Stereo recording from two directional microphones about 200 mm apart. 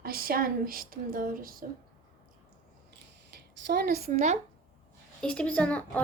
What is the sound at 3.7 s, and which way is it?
Speech, 50° right (ahead or behind).